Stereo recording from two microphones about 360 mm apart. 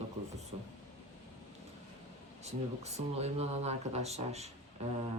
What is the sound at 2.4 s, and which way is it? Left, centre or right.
Speech, centre.